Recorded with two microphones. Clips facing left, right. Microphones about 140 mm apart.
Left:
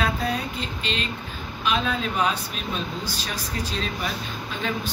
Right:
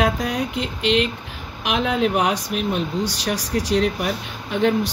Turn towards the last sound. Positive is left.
turn(degrees=-65)  # may be behind; listen again after turning